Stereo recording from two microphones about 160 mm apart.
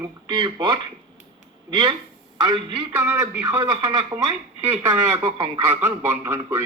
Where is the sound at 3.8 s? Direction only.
30° right (ahead or behind).